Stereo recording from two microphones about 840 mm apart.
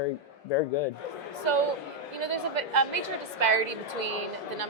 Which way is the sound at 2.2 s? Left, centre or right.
Right.